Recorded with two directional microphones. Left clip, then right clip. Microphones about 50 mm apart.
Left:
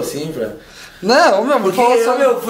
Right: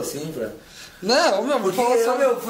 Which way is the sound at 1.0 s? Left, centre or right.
Left.